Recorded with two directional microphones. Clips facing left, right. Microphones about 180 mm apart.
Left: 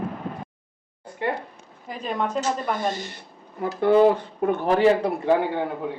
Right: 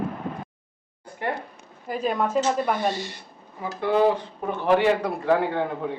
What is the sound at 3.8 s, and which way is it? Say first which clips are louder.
Speech: left 4 dB; 55° left (ahead or behind).